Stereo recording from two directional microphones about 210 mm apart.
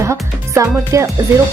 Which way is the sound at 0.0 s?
15° right (ahead or behind).